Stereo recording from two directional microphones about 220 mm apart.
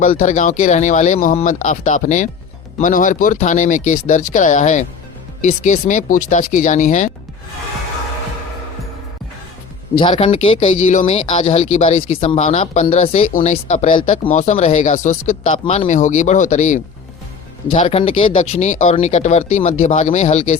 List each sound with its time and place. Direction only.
0.1 s speech: 35° left (ahead or behind)
9.9 s speech: 20° left (ahead or behind)